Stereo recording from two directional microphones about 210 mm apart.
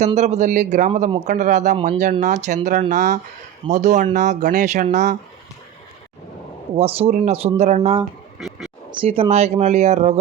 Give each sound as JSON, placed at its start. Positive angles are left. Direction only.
{"t": 0.0, "sound": "speech", "side_deg": -30}
{"t": 6.7, "sound": "speech", "side_deg": -30}
{"t": 8.4, "sound": "a sound", "side_deg": 0}
{"t": 8.9, "sound": "speech", "side_deg": -25}